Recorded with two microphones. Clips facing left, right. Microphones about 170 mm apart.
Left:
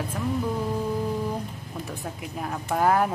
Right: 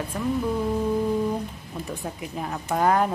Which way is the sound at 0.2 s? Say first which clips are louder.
Right 3 dB; centre (ahead or behind).